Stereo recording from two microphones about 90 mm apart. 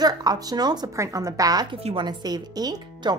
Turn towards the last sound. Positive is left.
turn(degrees=-45)  # may be behind; listen again after turning